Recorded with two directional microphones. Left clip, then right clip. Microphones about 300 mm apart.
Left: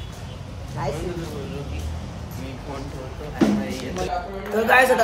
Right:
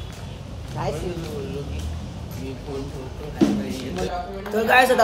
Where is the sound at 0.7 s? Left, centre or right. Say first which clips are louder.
Even; centre.